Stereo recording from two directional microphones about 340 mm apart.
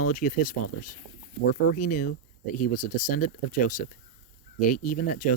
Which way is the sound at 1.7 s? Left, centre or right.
Left.